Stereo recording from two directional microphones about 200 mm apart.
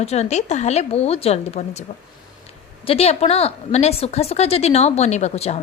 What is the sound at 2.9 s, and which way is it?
A woman's voice, 30° left (ahead or behind).